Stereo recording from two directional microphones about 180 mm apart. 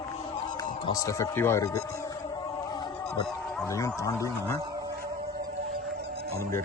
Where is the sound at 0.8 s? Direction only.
20° left (ahead or behind).